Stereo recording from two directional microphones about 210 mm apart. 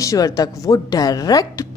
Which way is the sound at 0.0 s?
15° left (ahead or behind).